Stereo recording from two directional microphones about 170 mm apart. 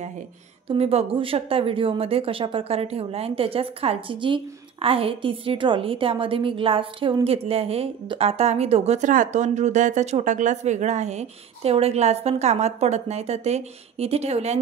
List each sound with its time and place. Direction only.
0.7 s a woman's voice: 35° right (ahead or behind)